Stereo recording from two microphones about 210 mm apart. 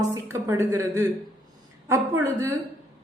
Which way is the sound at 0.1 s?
15° right (ahead or behind).